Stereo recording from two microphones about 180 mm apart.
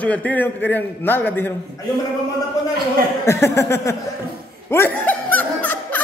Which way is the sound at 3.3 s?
15° left (ahead or behind).